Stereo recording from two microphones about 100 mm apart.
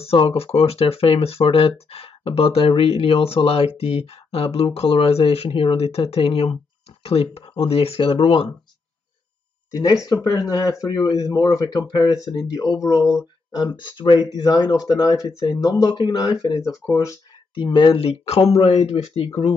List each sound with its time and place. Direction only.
0.0 s speech: 85° left; by 8.5 s 65° left (ahead or behind)
9.7 s speech: 35° left (ahead or behind)
13.6 s speech: 50° left (ahead or behind)
16.9 s speech: 35° left (ahead or behind)
17.6 s speech: 55° left (ahead or behind); by 19.5 s 90° left